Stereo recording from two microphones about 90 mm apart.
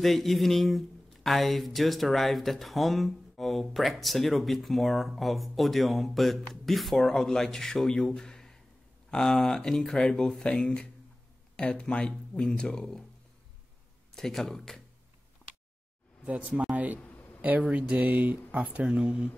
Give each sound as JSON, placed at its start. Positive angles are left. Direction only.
{"t": 0.0, "sound": "speech", "side_deg": 0}
{"t": 14.1, "sound": "speech", "side_deg": 5}
{"t": 15.4, "sound": "a sound", "side_deg": 20}
{"t": 16.3, "sound": "speech", "side_deg": -15}
{"t": 17.0, "sound": "a sound", "side_deg": 20}
{"t": 17.4, "sound": "speech", "side_deg": -15}